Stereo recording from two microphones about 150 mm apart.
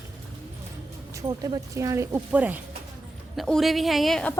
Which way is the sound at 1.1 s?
20° right (ahead or behind).